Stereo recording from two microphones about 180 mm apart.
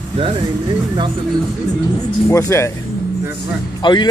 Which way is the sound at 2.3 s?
15° left (ahead or behind).